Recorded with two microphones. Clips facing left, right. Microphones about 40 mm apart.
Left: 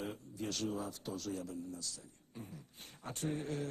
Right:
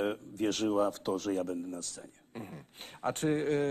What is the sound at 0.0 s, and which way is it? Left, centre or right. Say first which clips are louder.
A man's voice: right 10 dB; right.